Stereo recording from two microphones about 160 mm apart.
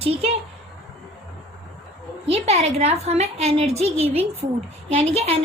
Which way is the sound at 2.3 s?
40° right (ahead or behind).